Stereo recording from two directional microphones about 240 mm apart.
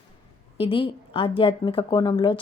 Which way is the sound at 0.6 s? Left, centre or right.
Left.